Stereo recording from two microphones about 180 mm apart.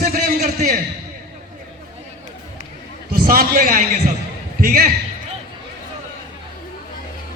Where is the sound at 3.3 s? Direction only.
50° right (ahead or behind).